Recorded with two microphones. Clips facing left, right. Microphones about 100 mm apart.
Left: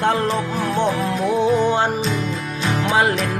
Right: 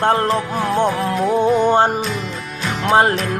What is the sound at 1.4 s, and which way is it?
Music, 50° right (ahead or behind).